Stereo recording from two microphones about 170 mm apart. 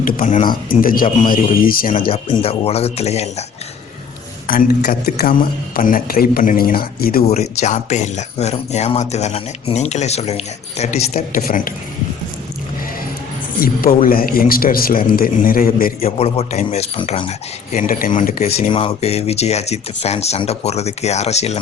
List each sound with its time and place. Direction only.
0.0 s a man's voice: 50° left (ahead or behind)
2.0 s speech: 30° left (ahead or behind)
4.4 s a man's voice: 55° left (ahead or behind)
7.3 s speech: 40° left (ahead or behind)
11.3 s a man's voice: 55° left (ahead or behind)
13.6 s a man's voice: 60° left (ahead or behind)
16.0 s speech: 35° left (ahead or behind)
18.4 s speech: 35° left (ahead or behind)